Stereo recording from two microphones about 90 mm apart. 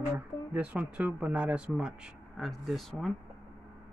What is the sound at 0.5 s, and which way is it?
Speech, 15° right (ahead or behind).